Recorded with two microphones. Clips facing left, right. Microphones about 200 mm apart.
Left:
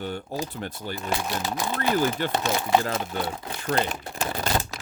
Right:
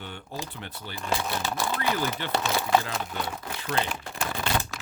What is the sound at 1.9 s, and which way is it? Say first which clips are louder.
Speech: left 6 dB; 45° left (ahead or behind).